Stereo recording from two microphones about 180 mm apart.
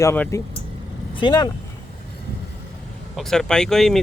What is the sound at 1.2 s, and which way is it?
Speech, 25° left (ahead or behind).